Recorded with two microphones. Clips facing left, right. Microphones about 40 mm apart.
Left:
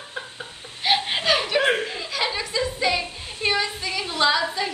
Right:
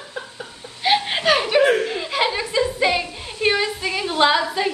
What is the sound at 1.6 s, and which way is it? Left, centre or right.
Speech, left.